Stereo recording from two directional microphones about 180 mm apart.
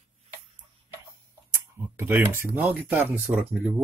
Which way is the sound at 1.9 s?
10° right (ahead or behind).